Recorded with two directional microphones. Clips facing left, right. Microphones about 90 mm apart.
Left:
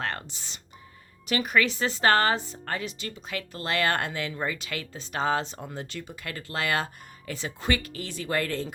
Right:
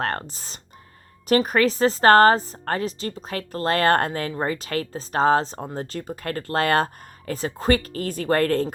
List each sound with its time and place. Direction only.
0.0 s a woman's voice: 40° right (ahead or behind)